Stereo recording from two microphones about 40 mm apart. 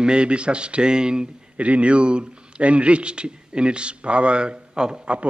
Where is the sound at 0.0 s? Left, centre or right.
Right.